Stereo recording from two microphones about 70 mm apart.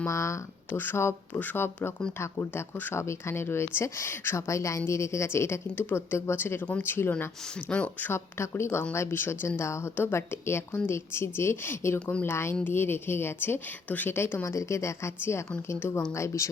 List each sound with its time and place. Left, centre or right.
0.1 s a woman's voice: left
0.7 s a woman's voice: left
8.1 s a woman's voice: left
14.4 s a woman's voice: left
16.1 s a woman's voice: left